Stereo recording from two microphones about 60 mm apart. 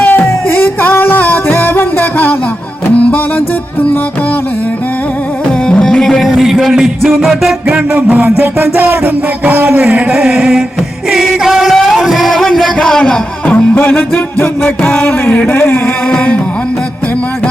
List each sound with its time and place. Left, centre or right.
0.0 s music: left
5.6 s music: centre
6.2 s music: centre
8.1 s music: right
9.4 s speech: right
10.2 s a sound: centre
11.1 s music: centre
12.8 s a sound: centre
13.5 s speech: left